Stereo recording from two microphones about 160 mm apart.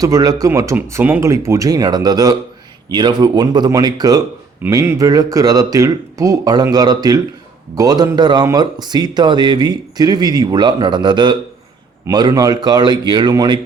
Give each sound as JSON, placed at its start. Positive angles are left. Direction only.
{"t": 0.0, "sound": "speech", "side_deg": -20}